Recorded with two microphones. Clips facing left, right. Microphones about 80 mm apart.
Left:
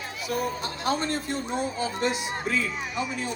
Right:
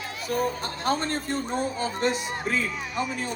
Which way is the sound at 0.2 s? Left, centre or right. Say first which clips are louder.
Right 2 dB; right.